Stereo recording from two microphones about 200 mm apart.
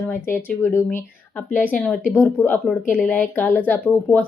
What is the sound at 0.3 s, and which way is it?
Speech, 10° left (ahead or behind).